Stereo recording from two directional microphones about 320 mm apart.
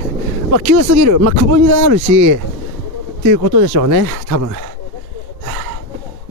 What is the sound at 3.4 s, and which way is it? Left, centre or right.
Speech, right.